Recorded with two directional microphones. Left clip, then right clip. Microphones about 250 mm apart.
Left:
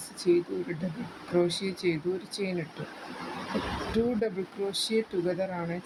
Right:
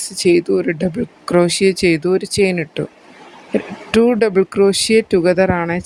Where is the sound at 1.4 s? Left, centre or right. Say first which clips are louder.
Right 15 dB; right.